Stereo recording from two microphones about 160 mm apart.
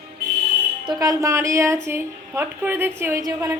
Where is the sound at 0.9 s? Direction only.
20° right (ahead or behind).